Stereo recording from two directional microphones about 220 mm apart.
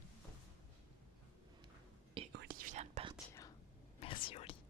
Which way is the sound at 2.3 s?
45° right (ahead or behind).